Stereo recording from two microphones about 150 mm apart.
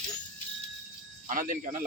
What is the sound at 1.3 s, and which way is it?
Speech, 65° right (ahead or behind).